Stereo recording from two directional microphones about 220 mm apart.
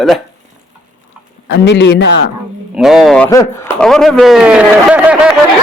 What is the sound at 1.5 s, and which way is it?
Speech, 50° left (ahead or behind).